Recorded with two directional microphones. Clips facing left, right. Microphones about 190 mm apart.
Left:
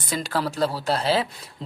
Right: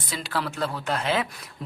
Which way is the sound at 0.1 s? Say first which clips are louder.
Left 4 dB; 45° left (ahead or behind).